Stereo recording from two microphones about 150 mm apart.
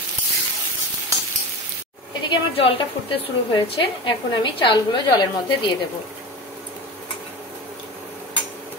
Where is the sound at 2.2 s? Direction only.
35° left (ahead or behind).